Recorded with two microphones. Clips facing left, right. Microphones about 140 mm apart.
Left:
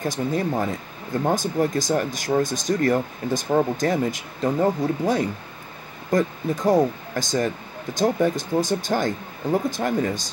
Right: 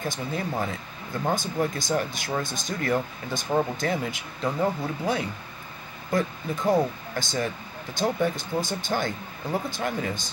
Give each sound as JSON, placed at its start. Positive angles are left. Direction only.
{"t": 0.0, "sound": "speech", "side_deg": 45}